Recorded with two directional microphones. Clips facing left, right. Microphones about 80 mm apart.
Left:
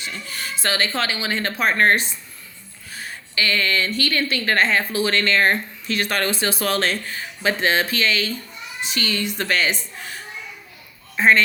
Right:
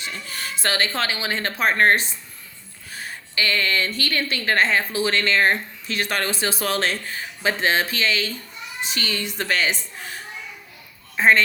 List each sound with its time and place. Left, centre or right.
0.0 s a woman's voice: right